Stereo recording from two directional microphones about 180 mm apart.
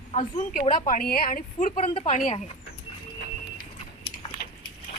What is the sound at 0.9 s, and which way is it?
Speech, 55° left (ahead or behind).